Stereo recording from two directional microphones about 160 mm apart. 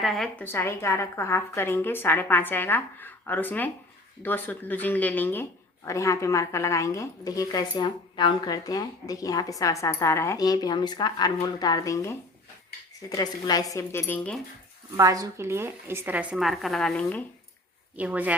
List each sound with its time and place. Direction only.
0.0 s a woman's voice: centre (ahead or behind)
0.4 s a woman's voice: 15° left (ahead or behind)
14.9 s a woman's voice: 20° right (ahead or behind); by 17.2 s 10° left (ahead or behind)
17.9 s a woman's voice: 10° right (ahead or behind)